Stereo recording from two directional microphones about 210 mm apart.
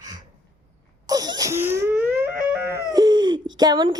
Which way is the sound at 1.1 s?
20° right (ahead or behind).